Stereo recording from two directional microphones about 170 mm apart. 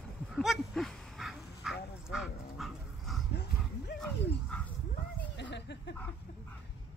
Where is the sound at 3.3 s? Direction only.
75° left (ahead or behind).